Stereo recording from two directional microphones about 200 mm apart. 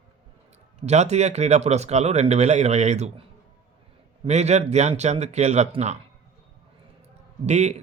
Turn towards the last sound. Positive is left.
turn(degrees=-35)  # may be behind; listen again after turning